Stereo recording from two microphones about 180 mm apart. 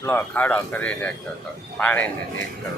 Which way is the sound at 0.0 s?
10° left (ahead or behind).